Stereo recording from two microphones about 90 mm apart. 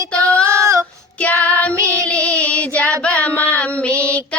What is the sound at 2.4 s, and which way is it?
Child singing, 15° left (ahead or behind).